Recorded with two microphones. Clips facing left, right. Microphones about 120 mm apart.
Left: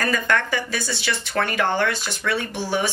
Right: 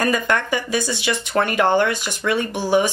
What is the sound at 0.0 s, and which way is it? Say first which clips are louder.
A woman's voice: right 2 dB; 15° right (ahead or behind).